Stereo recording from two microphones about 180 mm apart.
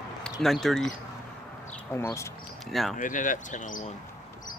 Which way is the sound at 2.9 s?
45° left (ahead or behind).